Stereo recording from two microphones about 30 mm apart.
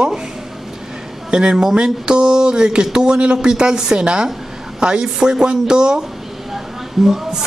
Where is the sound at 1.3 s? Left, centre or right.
Right.